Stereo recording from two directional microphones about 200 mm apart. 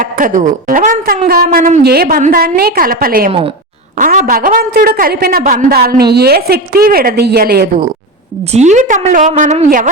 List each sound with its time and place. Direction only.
0.0 s a woman's voice: 40° right (ahead or behind)
8.5 s a woman's voice: 35° right (ahead or behind)